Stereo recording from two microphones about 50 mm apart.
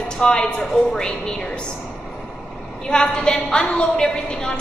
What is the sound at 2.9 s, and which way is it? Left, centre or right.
A woman's voice, centre.